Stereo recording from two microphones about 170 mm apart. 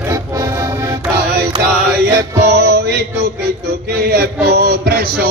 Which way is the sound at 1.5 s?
30° right (ahead or behind).